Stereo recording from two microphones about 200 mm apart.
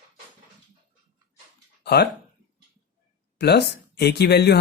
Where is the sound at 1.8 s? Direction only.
55° left (ahead or behind).